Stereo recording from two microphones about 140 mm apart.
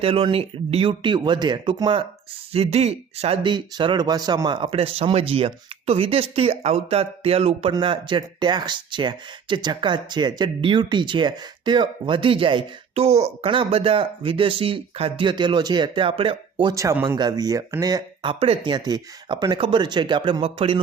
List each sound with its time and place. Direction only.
0.0 s speech: 40° right (ahead or behind)
3.5 s speech: 35° right (ahead or behind)
16.7 s speech: 20° right (ahead or behind); by 20.8 s 40° right (ahead or behind)